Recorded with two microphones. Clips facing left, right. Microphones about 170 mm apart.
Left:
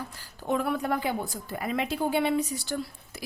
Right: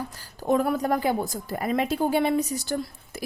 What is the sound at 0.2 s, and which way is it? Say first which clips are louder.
A woman's voice: right 6 dB; 40° right (ahead or behind).